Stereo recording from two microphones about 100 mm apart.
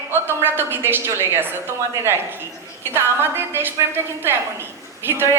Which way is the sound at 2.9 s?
20° right (ahead or behind).